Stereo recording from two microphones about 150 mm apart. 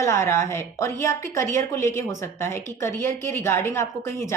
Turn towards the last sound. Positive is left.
turn(degrees=15)  # may be behind; listen again after turning